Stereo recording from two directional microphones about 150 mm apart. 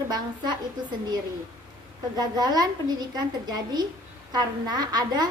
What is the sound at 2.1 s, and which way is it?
A woman's voice, 25° right (ahead or behind).